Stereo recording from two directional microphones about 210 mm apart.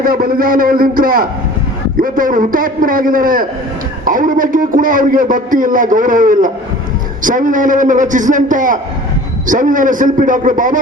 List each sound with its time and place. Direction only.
0.0 s a man's voice: 45° right (ahead or behind)